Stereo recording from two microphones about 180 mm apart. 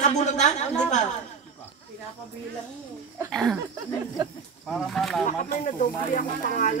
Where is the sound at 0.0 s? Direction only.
40° left (ahead or behind).